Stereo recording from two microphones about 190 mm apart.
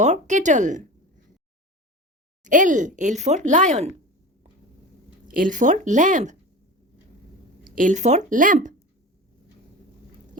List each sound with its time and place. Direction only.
0.0 s speech: 40° right (ahead or behind)
2.4 s speech: 40° right (ahead or behind)
5.3 s speech: 45° right (ahead or behind)
7.8 s speech: 40° right (ahead or behind)